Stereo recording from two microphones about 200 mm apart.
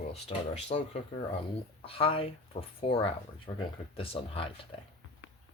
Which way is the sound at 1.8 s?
25° left (ahead or behind).